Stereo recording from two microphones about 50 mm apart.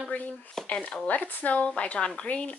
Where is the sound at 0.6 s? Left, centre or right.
Centre.